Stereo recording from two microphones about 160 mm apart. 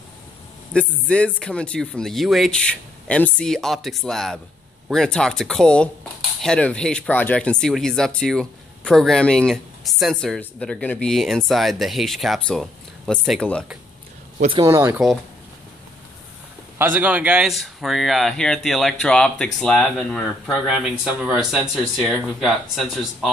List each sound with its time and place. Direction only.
0.7 s speech: 5° left (ahead or behind)
14.5 s speech: 20° right (ahead or behind)
16.7 s speech: 10° right (ahead or behind)